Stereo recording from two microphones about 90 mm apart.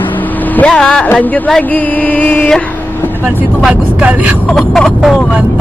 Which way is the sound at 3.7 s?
15° right (ahead or behind).